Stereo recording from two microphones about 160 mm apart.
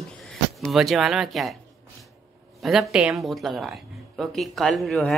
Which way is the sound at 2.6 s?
Centre (ahead or behind).